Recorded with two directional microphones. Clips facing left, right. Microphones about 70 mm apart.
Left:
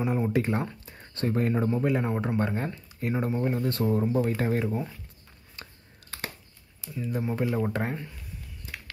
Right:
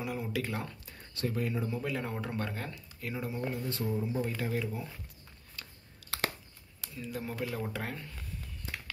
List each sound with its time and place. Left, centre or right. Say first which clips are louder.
0.0 s a sound: left 9 dB; left
0.3 s speech: left 8 dB; left
1.1 s speech: left 7 dB; left
1.7 s speech: left 9 dB; left
3.6 s speech: left 8 dB; left
4.4 s speech: left 7 dB; left
5.6 s a sound: left 3 dB; left
6.0 s a sound: right 3 dB; right
7.0 s speech: left 8 dB; left